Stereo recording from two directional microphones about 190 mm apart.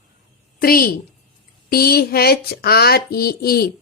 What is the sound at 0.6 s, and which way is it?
A woman's voice, 50° left (ahead or behind).